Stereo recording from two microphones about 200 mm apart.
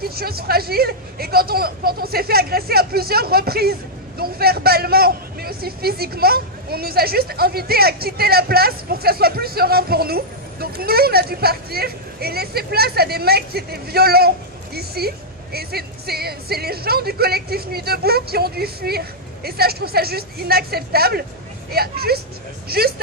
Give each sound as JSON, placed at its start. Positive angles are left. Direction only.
{"t": 0.0, "sound": "a man's voice", "side_deg": -50}